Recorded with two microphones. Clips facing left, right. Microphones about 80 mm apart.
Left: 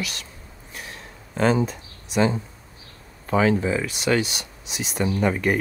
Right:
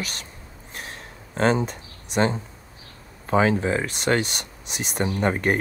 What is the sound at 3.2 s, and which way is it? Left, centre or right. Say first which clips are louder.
Speech: even; right.